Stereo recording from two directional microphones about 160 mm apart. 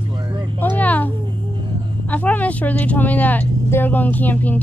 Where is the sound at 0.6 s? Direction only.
10° left (ahead or behind).